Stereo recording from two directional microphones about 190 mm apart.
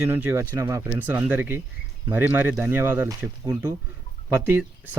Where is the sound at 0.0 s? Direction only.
15° right (ahead or behind).